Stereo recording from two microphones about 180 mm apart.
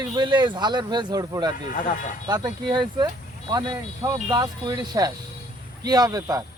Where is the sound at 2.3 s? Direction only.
25° right (ahead or behind).